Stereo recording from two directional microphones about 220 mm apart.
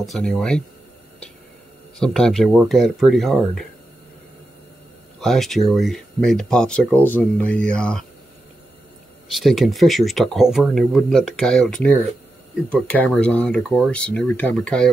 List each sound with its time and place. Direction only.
0.0 s speech: centre (ahead or behind)
2.0 s speech: 5° left (ahead or behind)
5.2 s speech: centre (ahead or behind)
9.3 s speech: centre (ahead or behind)